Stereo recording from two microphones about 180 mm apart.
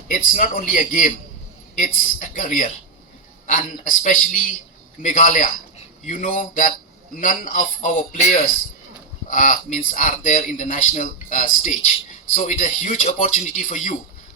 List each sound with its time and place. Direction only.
0.1 s speech: 50° left (ahead or behind)